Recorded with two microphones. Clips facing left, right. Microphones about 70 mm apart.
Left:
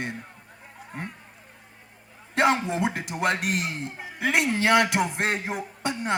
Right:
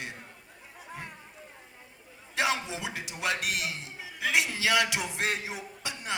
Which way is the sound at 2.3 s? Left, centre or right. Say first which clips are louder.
Left 7 dB; left.